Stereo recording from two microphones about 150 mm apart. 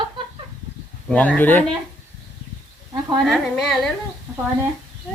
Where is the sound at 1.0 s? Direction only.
10° left (ahead or behind).